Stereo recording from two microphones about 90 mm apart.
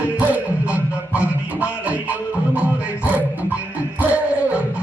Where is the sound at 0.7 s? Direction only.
15° right (ahead or behind).